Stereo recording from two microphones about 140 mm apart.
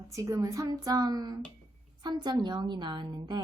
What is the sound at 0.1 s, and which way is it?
A woman's voice, 20° right (ahead or behind).